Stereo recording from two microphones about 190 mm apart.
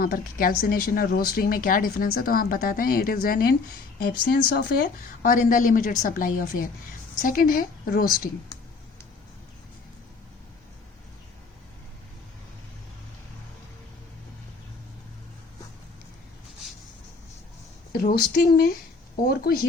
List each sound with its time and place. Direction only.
0.0 s speech: 50° left (ahead or behind)
5.2 s speech: 45° left (ahead or behind)
17.9 s speech: 55° left (ahead or behind)